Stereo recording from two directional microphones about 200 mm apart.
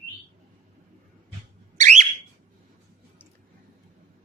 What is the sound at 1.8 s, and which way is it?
Alarm, 40° right (ahead or behind).